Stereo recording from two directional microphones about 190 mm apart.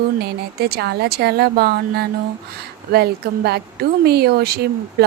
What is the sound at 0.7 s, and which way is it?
A woman's voice, 55° right (ahead or behind).